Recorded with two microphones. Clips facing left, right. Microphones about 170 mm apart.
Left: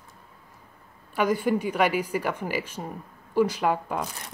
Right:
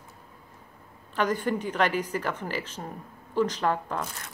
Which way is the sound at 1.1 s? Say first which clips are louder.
Left 3 dB; 10° left (ahead or behind).